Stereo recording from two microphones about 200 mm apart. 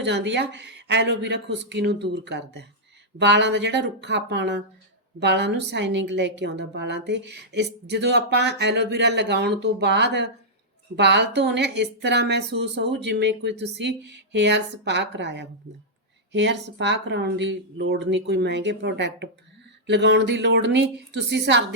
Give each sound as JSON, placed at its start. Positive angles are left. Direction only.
{"t": 0.0, "sound": "a woman's voice", "side_deg": -60}